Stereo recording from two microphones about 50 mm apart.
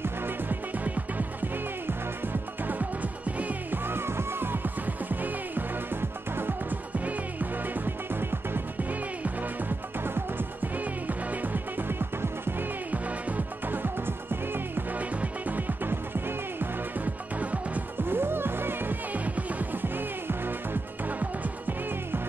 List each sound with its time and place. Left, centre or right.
0.0 s music: right
0.8 s music: right
3.7 s music: right
10.0 s music: right
13.7 s music: right
15.0 s music: right
17.4 s music: right
18.0 s music: right